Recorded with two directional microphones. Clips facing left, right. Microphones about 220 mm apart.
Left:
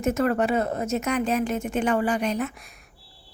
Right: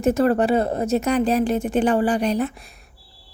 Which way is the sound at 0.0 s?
35° right (ahead or behind).